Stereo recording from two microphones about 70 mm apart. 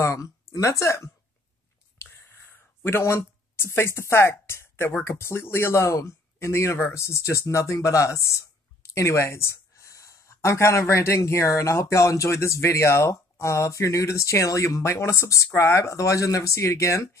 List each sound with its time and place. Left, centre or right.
0.0 s speech: left
2.8 s speech: left